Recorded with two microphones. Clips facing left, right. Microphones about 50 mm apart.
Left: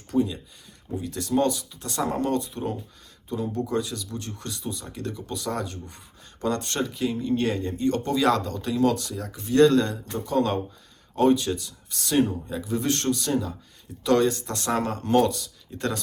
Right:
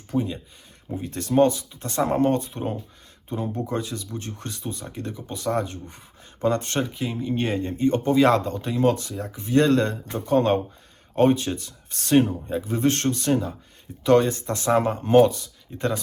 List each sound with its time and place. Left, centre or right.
0.1 s speech: right
0.9 s speech: right
4.9 s speech: right
5.4 s speech: right